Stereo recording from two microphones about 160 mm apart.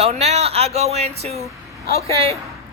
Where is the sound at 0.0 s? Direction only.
40° right (ahead or behind).